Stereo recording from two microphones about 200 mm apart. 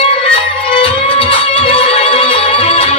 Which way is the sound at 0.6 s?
25° left (ahead or behind).